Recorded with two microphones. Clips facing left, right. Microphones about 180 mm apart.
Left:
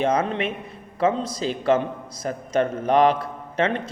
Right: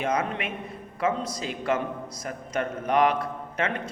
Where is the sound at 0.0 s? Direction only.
30° left (ahead or behind).